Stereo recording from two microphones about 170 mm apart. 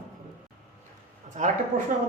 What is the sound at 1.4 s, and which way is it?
Speech, 45° right (ahead or behind).